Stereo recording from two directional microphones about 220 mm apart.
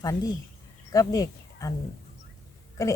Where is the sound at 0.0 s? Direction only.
15° left (ahead or behind).